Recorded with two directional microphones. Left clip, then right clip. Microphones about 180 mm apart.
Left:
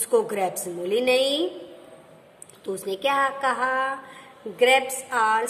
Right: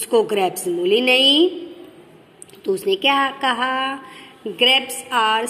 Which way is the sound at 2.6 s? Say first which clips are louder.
Right 8 dB; centre (ahead or behind).